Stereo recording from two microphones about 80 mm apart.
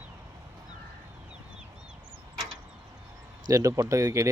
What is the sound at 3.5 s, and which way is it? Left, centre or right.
Speech, right.